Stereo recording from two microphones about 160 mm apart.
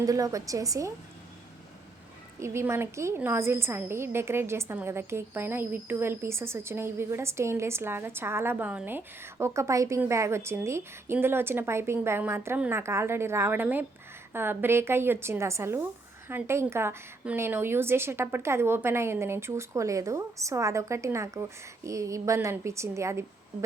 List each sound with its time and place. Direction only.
0.0 s a woman's voice: 20° right (ahead or behind)
2.4 s a woman's voice: 15° right (ahead or behind)